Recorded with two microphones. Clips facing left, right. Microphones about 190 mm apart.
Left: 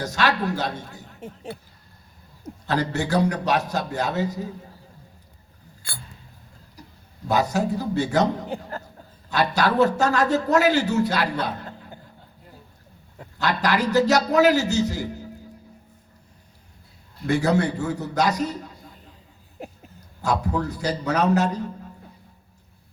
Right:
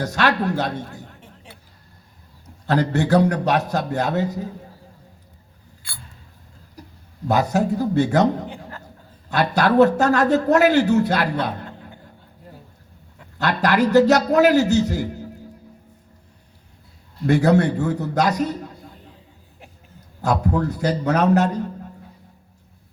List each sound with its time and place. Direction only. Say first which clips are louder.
0.0 s speech: right 3 dB; 60° right (ahead or behind)
2.6 s speech: right 5 dB; 60° right (ahead or behind)
7.3 s speech: right 3 dB; 55° right (ahead or behind)
8.4 s a sound: left 4 dB; 40° left (ahead or behind)
9.3 s speech: right 4 dB; 55° right (ahead or behind)
13.4 s speech: right 4 dB; 60° right (ahead or behind)
17.3 s speech: right 4 dB; 60° right (ahead or behind)
19.6 s a sound: left 10 dB; 40° left (ahead or behind)
20.2 s speech: right 3 dB; 60° right (ahead or behind)